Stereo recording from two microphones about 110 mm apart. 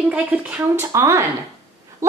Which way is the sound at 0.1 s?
10° right (ahead or behind).